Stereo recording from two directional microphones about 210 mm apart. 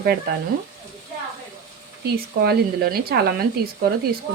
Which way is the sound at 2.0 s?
50° right (ahead or behind).